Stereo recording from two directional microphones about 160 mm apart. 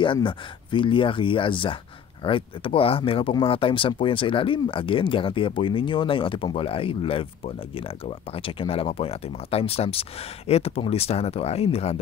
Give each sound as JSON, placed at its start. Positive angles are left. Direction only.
{"t": 0.0, "sound": "speech", "side_deg": 30}